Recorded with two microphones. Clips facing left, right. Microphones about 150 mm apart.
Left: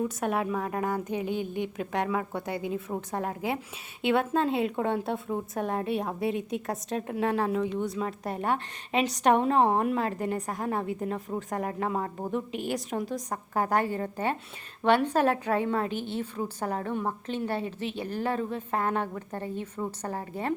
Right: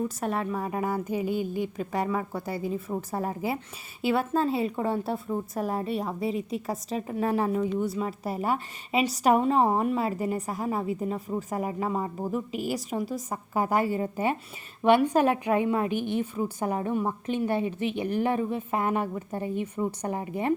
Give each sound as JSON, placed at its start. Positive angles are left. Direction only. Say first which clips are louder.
{"t": 0.2, "sound": "a woman's voice", "louder": "left 1 dB", "side_deg": 0}